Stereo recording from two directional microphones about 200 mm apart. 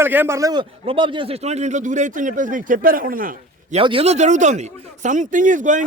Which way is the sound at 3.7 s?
30° right (ahead or behind).